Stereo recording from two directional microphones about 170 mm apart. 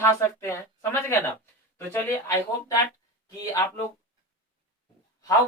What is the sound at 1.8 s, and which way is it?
Speech, 15° left (ahead or behind).